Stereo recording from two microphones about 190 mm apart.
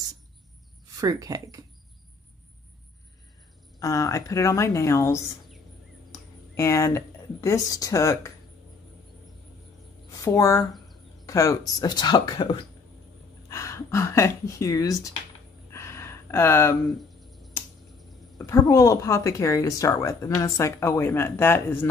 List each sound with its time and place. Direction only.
0.9 s speech: 20° right (ahead or behind)
3.8 s a woman's voice: 15° left (ahead or behind)
6.5 s a woman's voice: 15° left (ahead or behind)
10.1 s speech: 15° left (ahead or behind)
15.7 s a sound: 15° left (ahead or behind)
17.2 s a sound: centre (ahead or behind)
18.4 s a woman's voice: 15° left (ahead or behind)